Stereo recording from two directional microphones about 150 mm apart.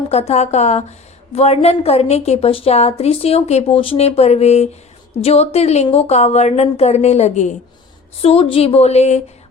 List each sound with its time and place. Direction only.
0.1 s a woman's voice: 45° left (ahead or behind)